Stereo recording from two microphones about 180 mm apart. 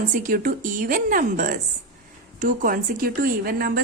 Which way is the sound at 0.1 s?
50° right (ahead or behind).